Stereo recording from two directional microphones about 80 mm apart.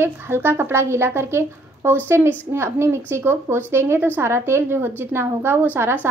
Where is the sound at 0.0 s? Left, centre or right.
Right.